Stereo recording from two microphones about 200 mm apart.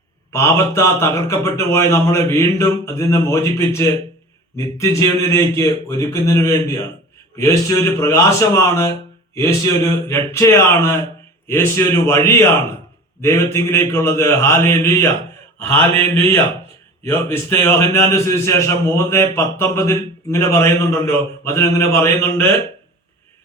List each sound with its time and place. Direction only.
0.3 s a man's voice: 15° left (ahead or behind)